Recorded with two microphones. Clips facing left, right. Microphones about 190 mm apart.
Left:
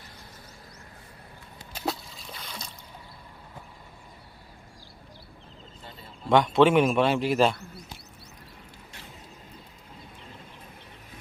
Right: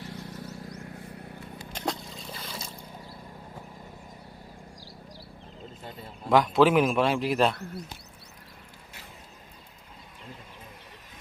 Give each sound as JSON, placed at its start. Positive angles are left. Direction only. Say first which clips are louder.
{"t": 0.0, "sound": "vehicle", "louder": "right 10 dB", "side_deg": -75}
{"t": 1.7, "sound": "a sound", "louder": "left 1 dB", "side_deg": 5}
{"t": 6.2, "sound": "a man's voice", "louder": "left 1 dB", "side_deg": 0}